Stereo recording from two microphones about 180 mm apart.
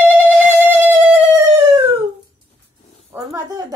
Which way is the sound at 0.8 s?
10° right (ahead or behind).